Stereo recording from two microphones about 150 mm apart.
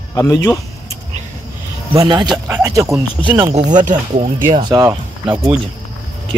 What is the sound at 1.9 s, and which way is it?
Speech, 35° right (ahead or behind).